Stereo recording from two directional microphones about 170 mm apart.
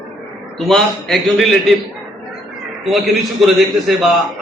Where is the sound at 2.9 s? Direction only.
Centre (ahead or behind).